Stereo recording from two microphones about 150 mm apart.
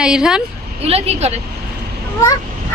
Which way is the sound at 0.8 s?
45° right (ahead or behind).